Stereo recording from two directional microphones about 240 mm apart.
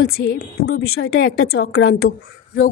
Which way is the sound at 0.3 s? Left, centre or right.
Left.